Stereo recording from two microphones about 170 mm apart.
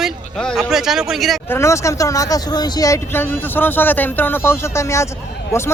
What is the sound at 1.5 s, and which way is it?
Speech, 15° left (ahead or behind).